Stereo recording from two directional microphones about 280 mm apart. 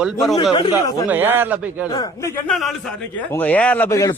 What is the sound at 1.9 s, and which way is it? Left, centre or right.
A man's voice, centre.